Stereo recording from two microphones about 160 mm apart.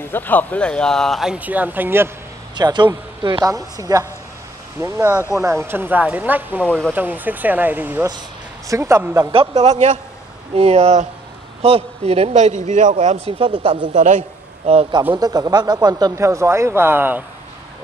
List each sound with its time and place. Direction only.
0.0 s speech: 10° left (ahead or behind); by 2.0 s 10° right (ahead or behind)
2.5 s speech: 25° right (ahead or behind); by 6.6 s 10° right (ahead or behind)
6.6 s speech: 5° left (ahead or behind)
6.9 s speech: 10° right (ahead or behind)
9.3 s a man's voice: 40° right (ahead or behind)
13.0 s speech: 40° right (ahead or behind)
13.8 s a man's voice: 55° right (ahead or behind)
14.7 s speech: 35° right (ahead or behind); by 17.2 s 15° right (ahead or behind)